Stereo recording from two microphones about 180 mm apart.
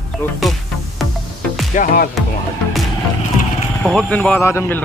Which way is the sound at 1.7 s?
45° left (ahead or behind).